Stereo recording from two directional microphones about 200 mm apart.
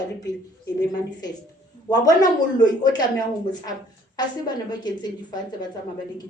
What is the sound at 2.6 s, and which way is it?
Speech, 20° left (ahead or behind).